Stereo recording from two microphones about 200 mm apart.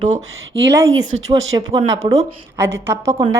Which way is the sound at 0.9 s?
75° right (ahead or behind).